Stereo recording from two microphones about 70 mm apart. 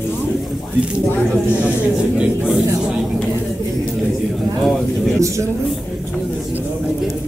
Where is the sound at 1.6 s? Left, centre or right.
Centre.